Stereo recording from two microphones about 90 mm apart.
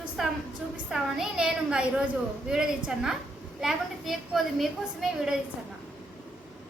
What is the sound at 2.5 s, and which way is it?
A woman's voice, 5° right (ahead or behind).